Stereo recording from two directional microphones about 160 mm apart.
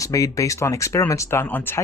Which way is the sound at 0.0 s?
20° left (ahead or behind).